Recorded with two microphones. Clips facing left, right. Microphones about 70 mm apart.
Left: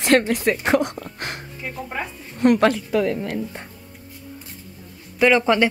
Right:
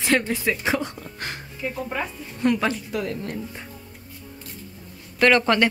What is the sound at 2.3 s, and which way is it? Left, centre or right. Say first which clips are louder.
Speech: left 6 dB; left.